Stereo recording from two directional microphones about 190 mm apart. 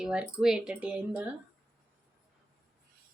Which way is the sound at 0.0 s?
5° right (ahead or behind).